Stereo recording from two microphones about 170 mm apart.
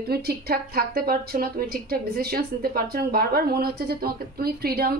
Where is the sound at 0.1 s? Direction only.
65° right (ahead or behind).